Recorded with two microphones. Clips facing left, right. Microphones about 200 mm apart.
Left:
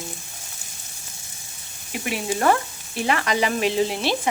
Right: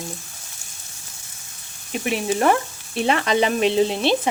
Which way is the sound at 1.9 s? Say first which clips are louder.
Right 4 dB; 20° right (ahead or behind).